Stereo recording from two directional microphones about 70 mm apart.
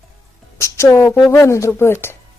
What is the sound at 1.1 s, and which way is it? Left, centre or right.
Speech, left.